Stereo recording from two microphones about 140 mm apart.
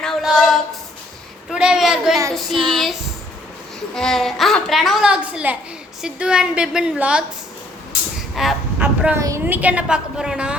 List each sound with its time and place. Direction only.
0.0 s a sound: centre (ahead or behind)
1.5 s a woman's voice: 5° right (ahead or behind)
8.4 s a woman's voice: centre (ahead or behind)
9.1 s a woman's voice: 20° right (ahead or behind)
9.6 s a woman's voice: 10° right (ahead or behind)